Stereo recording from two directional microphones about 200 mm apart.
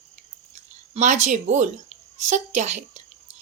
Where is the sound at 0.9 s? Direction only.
35° right (ahead or behind).